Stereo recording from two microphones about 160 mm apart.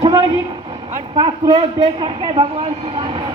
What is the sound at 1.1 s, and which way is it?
A man's voice, 25° right (ahead or behind).